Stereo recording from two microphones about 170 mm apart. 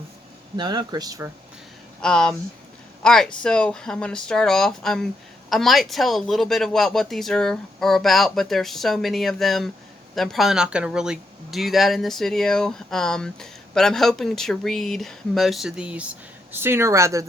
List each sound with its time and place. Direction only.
0.5 s speech: 25° right (ahead or behind)
2.0 s speech: 5° left (ahead or behind); by 17.2 s 20° right (ahead or behind)